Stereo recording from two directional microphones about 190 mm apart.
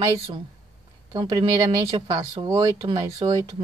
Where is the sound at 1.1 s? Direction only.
20° right (ahead or behind).